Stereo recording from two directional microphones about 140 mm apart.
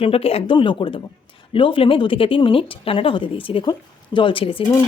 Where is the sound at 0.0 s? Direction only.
45° left (ahead or behind).